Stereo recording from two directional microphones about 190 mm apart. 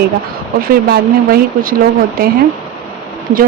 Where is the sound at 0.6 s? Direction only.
50° right (ahead or behind).